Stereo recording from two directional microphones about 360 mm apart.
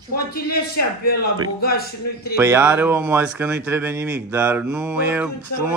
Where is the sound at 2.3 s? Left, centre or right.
Centre.